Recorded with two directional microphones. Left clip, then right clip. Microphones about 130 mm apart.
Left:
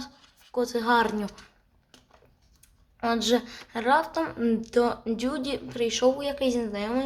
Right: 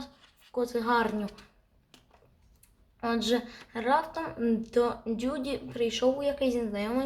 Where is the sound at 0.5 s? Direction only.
25° left (ahead or behind).